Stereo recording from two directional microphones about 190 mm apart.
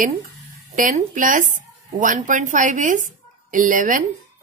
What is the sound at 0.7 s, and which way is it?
Speech, 45° right (ahead or behind).